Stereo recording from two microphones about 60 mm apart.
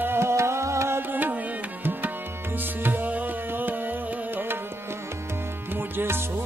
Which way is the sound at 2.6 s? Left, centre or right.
Right.